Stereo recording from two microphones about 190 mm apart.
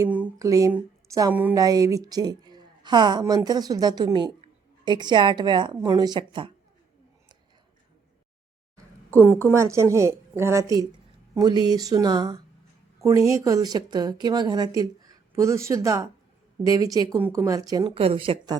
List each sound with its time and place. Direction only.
0.0 s speech: 10° right (ahead or behind)
1.5 s a woman's voice: 20° right (ahead or behind)
9.5 s a woman's voice: 15° right (ahead or behind)